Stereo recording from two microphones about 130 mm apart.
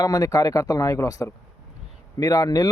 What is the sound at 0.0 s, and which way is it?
Speech, 30° left (ahead or behind).